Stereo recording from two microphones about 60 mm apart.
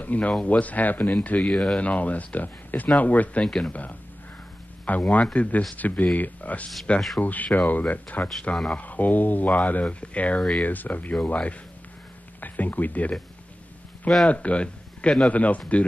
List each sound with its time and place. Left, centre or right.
0.0 s speech: left
1.5 s speech: centre
1.8 s speech: left
3.4 s speech: centre
4.8 s speech: left
14.2 s speech: left